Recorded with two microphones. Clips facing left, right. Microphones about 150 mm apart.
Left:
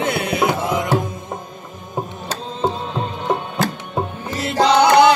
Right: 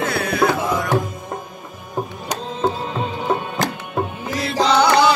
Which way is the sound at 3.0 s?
Centre (ahead or behind).